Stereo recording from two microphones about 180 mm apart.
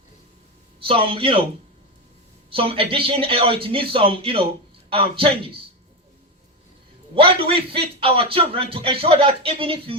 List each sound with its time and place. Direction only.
0.8 s a man's voice: 30° right (ahead or behind)
2.5 s a man's voice: 30° right (ahead or behind)
7.2 s a man's voice: 30° right (ahead or behind)